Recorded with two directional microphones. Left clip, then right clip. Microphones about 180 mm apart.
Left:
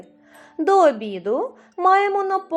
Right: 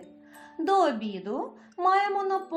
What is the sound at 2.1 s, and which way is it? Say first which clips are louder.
Speech: left 6 dB; 40° left (ahead or behind).